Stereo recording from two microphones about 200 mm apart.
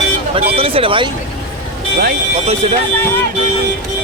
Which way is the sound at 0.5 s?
30° right (ahead or behind).